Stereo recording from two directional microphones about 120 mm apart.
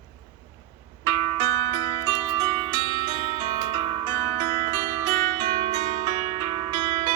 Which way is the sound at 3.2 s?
50° right (ahead or behind).